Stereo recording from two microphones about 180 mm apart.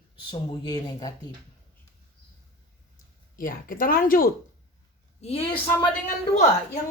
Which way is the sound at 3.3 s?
50° left (ahead or behind).